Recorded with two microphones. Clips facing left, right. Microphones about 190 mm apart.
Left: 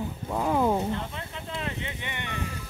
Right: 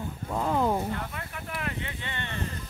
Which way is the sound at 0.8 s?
25° left (ahead or behind).